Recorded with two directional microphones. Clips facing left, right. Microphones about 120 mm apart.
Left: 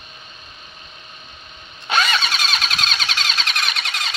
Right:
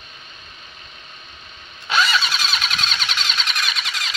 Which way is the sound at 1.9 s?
50° left (ahead or behind).